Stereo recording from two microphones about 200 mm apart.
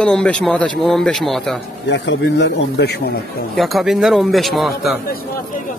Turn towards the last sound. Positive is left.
turn(degrees=0)  # may be behind; listen again after turning